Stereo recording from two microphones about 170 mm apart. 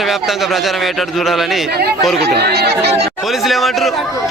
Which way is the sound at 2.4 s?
70° right (ahead or behind).